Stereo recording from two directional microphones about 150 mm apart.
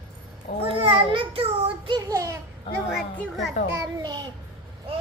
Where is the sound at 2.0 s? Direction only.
20° right (ahead or behind).